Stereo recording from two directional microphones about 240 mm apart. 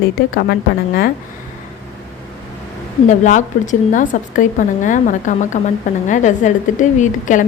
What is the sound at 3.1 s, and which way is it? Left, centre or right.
A woman's voice, left.